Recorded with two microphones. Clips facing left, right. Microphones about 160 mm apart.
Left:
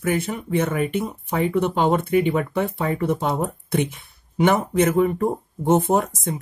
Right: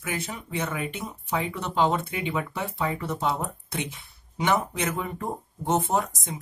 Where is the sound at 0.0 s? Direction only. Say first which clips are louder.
Left 10 dB; 55° left (ahead or behind).